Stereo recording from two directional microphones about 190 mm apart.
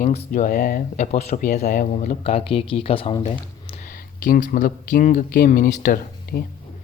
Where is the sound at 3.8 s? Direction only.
45° left (ahead or behind).